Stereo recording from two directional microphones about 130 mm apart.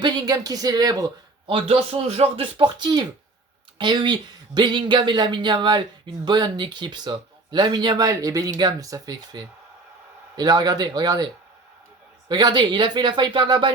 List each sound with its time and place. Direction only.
0.0 s a woman's voice: 30° right (ahead or behind)
1.5 s speech: 45° right (ahead or behind)
12.3 s speech: 35° right (ahead or behind)